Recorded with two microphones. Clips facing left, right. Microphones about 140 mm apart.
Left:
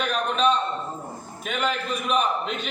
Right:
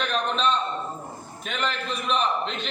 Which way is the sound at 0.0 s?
10° left (ahead or behind).